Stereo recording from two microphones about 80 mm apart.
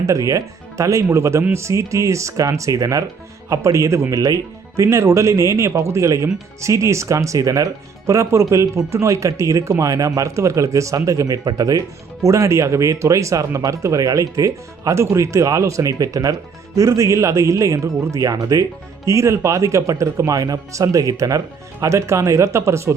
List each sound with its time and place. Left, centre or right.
0.1 s speech: right